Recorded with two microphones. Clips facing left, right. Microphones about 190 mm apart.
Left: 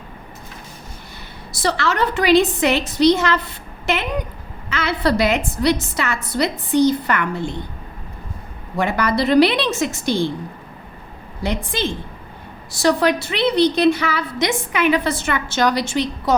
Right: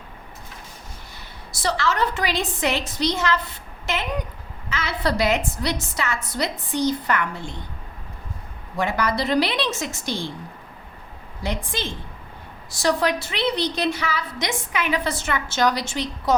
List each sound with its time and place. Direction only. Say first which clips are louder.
1.5 s a woman's voice: left 3 dB; 65° left (ahead or behind)
8.8 s a woman's voice: left 4 dB; 65° left (ahead or behind)
11.4 s a woman's voice: left 5 dB; 65° left (ahead or behind)